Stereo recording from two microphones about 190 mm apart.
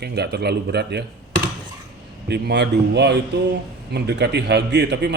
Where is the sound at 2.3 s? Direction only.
60° right (ahead or behind).